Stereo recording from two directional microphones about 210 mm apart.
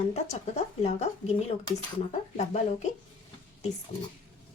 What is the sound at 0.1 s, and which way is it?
A woman's voice, 30° left (ahead or behind).